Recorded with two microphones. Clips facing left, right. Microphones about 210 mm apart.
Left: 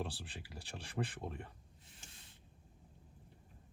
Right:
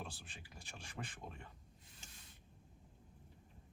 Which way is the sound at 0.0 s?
35° left (ahead or behind).